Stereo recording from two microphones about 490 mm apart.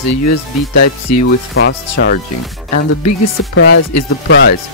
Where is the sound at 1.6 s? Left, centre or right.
Left.